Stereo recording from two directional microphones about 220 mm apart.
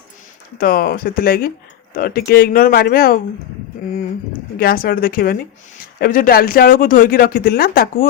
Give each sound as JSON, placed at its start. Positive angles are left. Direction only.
{"t": 0.6, "sound": "speech", "side_deg": 45}
{"t": 4.6, "sound": "speech", "side_deg": 40}